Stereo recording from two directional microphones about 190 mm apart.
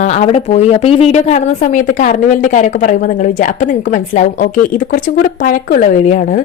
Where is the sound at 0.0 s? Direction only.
35° left (ahead or behind).